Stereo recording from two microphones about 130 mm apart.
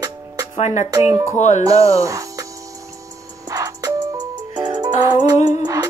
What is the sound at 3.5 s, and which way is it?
Music, 25° right (ahead or behind).